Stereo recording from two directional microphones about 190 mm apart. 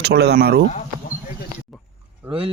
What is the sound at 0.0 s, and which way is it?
Speech, 60° right (ahead or behind).